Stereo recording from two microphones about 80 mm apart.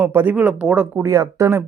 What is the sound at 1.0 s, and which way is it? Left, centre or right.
Speech, right.